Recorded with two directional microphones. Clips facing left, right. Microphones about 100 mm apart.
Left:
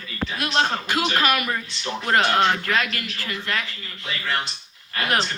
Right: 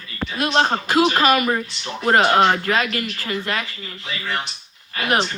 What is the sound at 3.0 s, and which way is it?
Speech, 35° right (ahead or behind).